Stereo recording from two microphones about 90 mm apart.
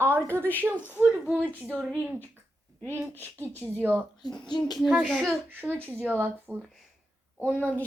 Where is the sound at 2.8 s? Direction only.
25° right (ahead or behind).